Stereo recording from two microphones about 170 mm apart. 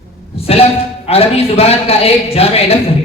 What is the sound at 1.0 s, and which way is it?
A man's voice, 35° left (ahead or behind).